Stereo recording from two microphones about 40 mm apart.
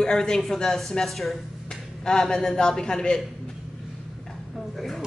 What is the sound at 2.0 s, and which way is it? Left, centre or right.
A man's voice, centre.